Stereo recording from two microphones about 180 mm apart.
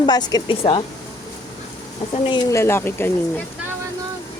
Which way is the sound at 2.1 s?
25° left (ahead or behind).